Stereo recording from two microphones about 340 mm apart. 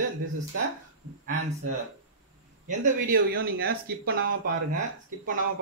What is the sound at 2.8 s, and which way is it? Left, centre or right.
Speech, right.